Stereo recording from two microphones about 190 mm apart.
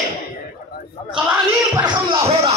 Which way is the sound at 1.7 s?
25° right (ahead or behind).